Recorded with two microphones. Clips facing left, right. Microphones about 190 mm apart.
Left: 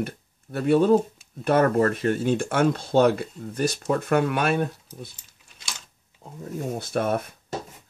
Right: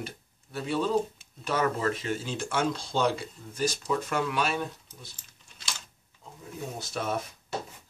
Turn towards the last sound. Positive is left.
turn(degrees=55)  # may be behind; listen again after turning